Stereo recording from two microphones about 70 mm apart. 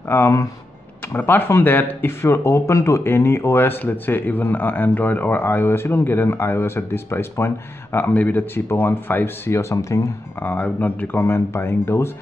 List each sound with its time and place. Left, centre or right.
0.1 s speech: left
10.4 s speech: left